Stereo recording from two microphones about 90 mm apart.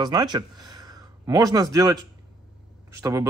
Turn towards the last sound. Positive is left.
turn(degrees=-35)  # may be behind; listen again after turning